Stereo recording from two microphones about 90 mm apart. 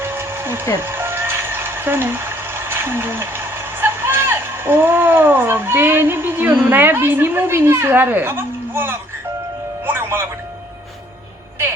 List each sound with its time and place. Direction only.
0.0 s a sound: 25° right (ahead or behind)
0.8 s speech: 25° right (ahead or behind)
9.8 s music: 25° right (ahead or behind)